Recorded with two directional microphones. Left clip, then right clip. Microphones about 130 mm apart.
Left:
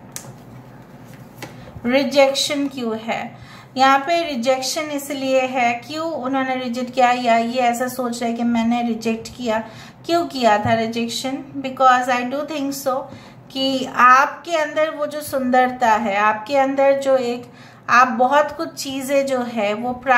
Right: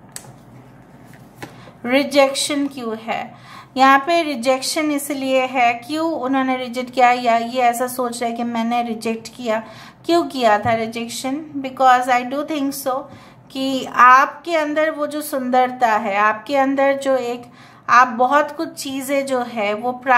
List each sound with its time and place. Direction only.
1.8 s a woman's voice: 45° right (ahead or behind); by 20.2 s 30° right (ahead or behind)